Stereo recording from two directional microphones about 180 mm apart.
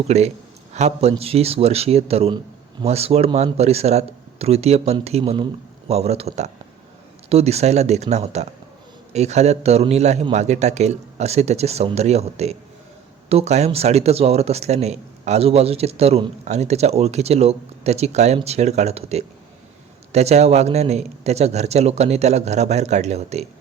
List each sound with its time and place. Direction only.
0.1 s speech: 35° right (ahead or behind)